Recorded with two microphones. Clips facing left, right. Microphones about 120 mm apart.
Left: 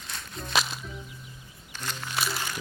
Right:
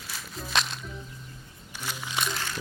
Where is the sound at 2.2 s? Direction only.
5° left (ahead or behind).